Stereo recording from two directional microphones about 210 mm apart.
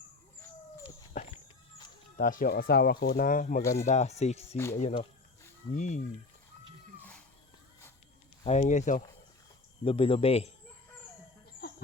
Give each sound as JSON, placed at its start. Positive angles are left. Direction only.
{"t": 1.2, "sound": "walk", "side_deg": 35}
{"t": 2.1, "sound": "speech", "side_deg": 40}
{"t": 4.5, "sound": "speech", "side_deg": 10}
{"t": 4.8, "sound": "speech", "side_deg": 35}
{"t": 8.4, "sound": "speech", "side_deg": 30}